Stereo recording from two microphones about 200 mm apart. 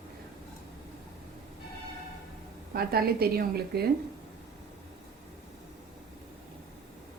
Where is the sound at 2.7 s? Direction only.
50° right (ahead or behind).